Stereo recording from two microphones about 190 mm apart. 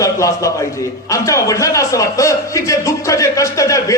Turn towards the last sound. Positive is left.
turn(degrees=15)  # may be behind; listen again after turning